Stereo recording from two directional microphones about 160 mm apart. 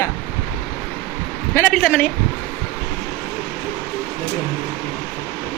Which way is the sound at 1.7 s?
5° left (ahead or behind).